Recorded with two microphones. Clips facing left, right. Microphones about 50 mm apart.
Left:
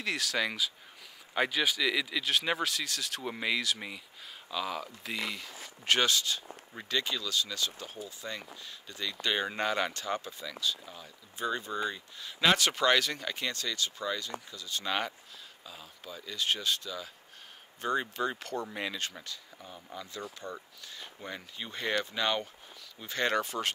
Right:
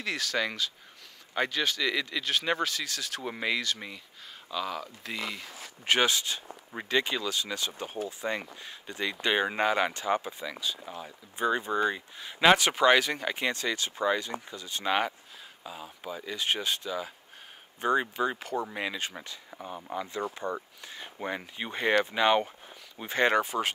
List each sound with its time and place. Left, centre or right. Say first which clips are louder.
0.0 s speech: right 1 dB; centre